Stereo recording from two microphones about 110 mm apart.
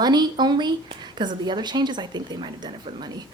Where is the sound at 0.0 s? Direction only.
40° right (ahead or behind).